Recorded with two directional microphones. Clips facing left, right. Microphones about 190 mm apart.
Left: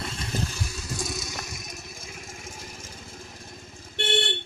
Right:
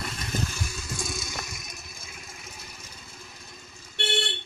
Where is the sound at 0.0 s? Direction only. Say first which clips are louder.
Left 1 dB; 30° left (ahead or behind).